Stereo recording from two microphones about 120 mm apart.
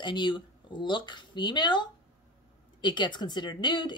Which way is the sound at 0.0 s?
40° left (ahead or behind).